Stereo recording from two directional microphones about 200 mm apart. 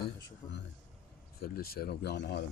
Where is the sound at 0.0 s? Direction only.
60° left (ahead or behind).